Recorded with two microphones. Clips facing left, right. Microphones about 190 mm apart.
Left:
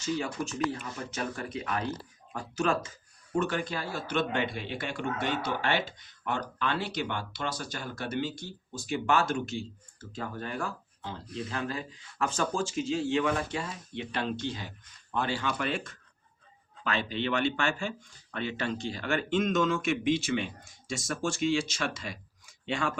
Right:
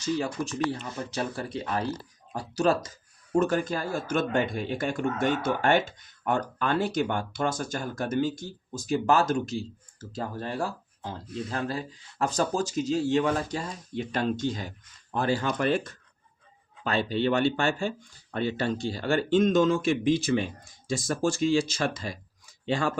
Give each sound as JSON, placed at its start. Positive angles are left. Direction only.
{"t": 0.0, "sound": "speech", "side_deg": -35}